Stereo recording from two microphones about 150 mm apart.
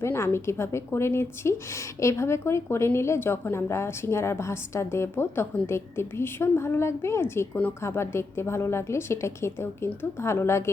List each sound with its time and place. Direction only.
0.0 s a woman's voice: 15° left (ahead or behind)